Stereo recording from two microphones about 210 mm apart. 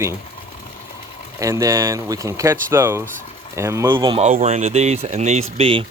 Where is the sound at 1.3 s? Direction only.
15° right (ahead or behind).